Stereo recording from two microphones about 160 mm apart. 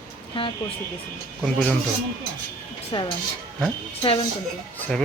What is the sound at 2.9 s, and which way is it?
A woman's voice, 30° left (ahead or behind).